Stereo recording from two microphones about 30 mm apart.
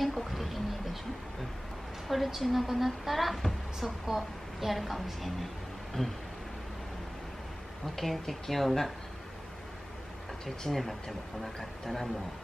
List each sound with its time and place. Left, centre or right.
0.0 s a sound: centre
2.0 s a woman's voice: centre
6.0 s speech: left
7.9 s speech: centre
10.4 s speech: centre
10.8 s a woman's voice: centre